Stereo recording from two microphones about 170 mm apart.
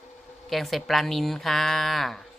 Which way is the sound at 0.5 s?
Centre (ahead or behind).